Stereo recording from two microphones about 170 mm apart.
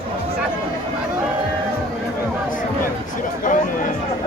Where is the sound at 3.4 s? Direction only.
50° left (ahead or behind).